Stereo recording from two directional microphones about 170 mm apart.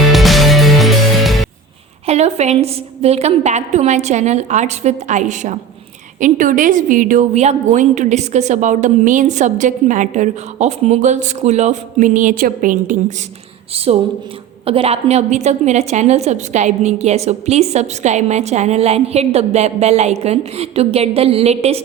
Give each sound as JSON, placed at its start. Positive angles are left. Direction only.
{"t": 0.1, "sound": "music", "side_deg": 0}
{"t": 2.0, "sound": "a woman's voice", "side_deg": -40}
{"t": 13.7, "sound": "a woman's voice", "side_deg": -35}